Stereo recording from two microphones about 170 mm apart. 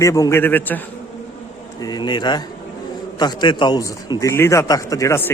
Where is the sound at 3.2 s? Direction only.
25° left (ahead or behind).